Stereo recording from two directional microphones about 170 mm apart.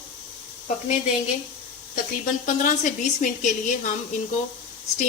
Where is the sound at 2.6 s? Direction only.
50° left (ahead or behind).